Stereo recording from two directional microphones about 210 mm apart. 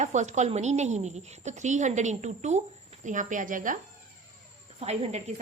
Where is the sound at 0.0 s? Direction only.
35° right (ahead or behind).